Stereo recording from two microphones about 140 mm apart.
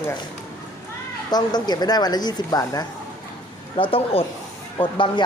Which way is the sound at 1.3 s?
30° left (ahead or behind).